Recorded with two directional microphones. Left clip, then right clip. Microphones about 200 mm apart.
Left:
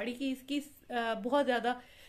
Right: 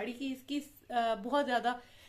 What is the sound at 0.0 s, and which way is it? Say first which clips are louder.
A woman's voice: left 2 dB; 30° left (ahead or behind).